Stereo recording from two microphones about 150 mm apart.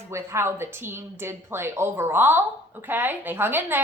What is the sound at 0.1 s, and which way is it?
A woman's voice, 20° right (ahead or behind).